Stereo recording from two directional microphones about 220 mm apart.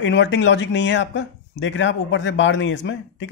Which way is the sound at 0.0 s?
55° left (ahead or behind).